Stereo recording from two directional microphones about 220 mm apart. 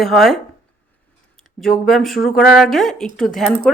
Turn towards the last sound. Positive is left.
turn(degrees=0)  # may be behind; listen again after turning